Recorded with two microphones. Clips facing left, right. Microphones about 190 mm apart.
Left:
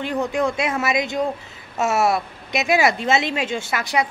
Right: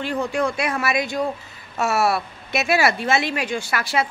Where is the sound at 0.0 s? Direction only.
20° left (ahead or behind).